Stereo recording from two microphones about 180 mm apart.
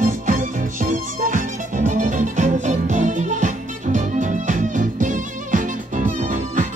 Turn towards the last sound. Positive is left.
turn(degrees=-40)  # may be behind; listen again after turning